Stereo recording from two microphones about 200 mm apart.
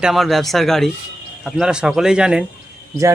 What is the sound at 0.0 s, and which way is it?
Speech, centre (ahead or behind).